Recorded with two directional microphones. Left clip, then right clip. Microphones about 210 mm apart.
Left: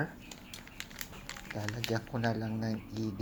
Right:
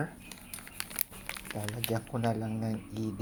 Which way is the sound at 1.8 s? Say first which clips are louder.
Right 1 dB; centre (ahead or behind).